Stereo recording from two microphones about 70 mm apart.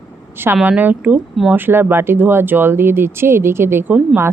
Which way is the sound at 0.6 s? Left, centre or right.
Right.